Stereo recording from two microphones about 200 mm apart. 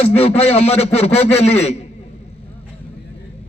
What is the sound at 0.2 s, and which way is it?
A man's voice, 30° left (ahead or behind).